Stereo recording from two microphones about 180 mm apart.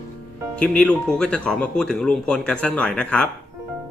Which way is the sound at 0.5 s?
5° left (ahead or behind).